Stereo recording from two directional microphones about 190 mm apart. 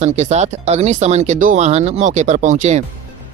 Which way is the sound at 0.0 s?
35° right (ahead or behind).